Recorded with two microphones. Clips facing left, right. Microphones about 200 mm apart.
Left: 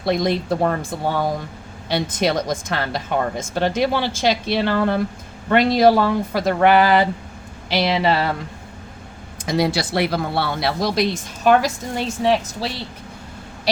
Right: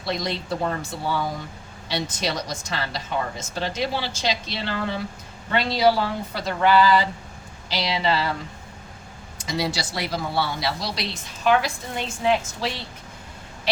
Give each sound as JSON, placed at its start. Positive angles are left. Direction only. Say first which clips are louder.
{"t": 0.0, "sound": "a woman's voice", "louder": "left 8 dB", "side_deg": 55}
{"t": 9.4, "sound": "a woman's voice", "louder": "left 7 dB", "side_deg": 55}
{"t": 12.2, "sound": "a woman's voice", "louder": "left 2 dB", "side_deg": 35}